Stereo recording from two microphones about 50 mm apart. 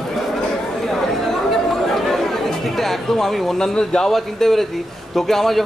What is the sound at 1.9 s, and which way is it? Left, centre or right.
A man's voice, centre.